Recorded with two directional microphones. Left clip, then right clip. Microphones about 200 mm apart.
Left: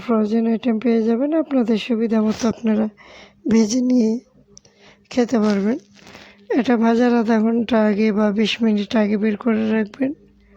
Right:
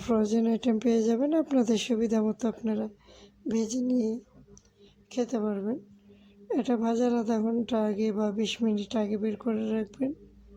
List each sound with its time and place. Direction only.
0.0 s speech: 5° left (ahead or behind)
2.4 s speech: 20° left (ahead or behind)
6.5 s speech: 15° left (ahead or behind)